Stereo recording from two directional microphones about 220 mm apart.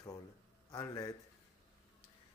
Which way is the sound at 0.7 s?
15° left (ahead or behind).